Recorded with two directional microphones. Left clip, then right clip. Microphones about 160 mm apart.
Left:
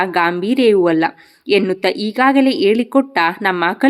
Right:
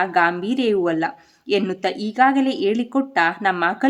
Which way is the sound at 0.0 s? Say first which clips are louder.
Left 2 dB; 25° left (ahead or behind).